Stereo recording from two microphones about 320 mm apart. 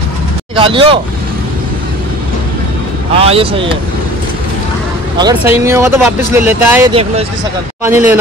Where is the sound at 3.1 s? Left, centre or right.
Centre.